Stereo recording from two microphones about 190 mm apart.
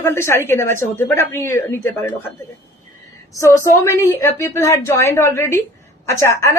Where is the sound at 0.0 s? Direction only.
15° left (ahead or behind).